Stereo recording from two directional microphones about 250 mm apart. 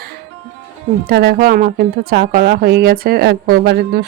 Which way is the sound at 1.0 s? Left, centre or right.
Right.